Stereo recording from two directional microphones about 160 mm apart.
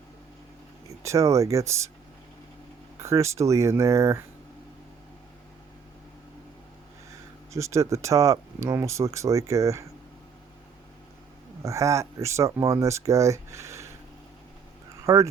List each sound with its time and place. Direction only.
1.0 s speech: 20° right (ahead or behind)
3.0 s speech: 20° right (ahead or behind)
7.5 s speech: 20° right (ahead or behind)
11.6 s speech: 20° right (ahead or behind)
15.0 s speech: 20° right (ahead or behind)